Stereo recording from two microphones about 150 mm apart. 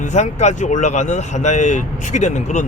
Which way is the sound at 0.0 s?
50° left (ahead or behind).